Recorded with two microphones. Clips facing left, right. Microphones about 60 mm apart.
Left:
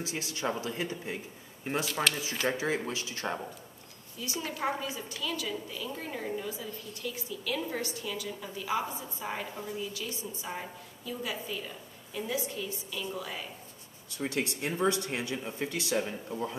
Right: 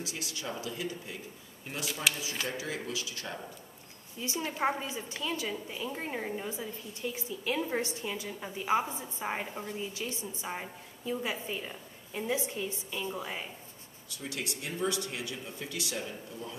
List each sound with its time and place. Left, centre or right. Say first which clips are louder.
0.0 s speech: left 5 dB; left
4.2 s a woman's voice: right 2 dB; right
14.1 s speech: left 6 dB; left